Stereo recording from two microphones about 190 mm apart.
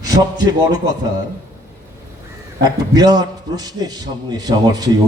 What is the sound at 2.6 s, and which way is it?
A man's voice, 20° right (ahead or behind).